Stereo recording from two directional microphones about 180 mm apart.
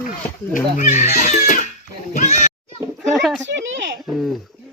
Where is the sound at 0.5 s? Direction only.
45° left (ahead or behind).